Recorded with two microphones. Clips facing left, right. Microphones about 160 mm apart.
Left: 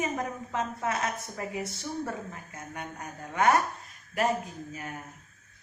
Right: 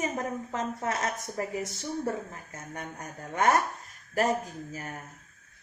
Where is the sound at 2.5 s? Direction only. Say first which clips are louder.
Even; 40° right (ahead or behind).